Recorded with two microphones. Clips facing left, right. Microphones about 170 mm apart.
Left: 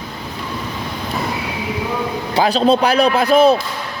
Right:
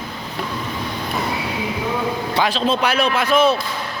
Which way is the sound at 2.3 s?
35° left (ahead or behind).